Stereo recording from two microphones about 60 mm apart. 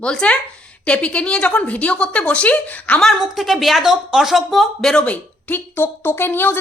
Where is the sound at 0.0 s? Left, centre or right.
Centre.